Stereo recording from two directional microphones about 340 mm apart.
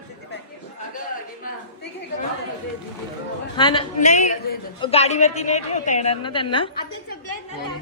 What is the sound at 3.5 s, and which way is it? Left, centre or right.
A woman's voice, centre.